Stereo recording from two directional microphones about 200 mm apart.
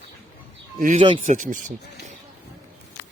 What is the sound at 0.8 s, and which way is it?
Speech, 40° right (ahead or behind).